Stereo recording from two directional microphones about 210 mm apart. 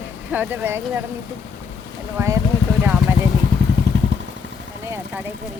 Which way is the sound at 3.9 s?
55° right (ahead or behind).